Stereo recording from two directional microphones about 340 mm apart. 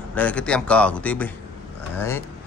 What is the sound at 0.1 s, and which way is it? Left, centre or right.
Speech, centre.